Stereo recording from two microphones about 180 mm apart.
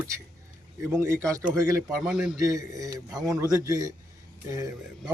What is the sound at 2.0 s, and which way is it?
Speech, 5° right (ahead or behind).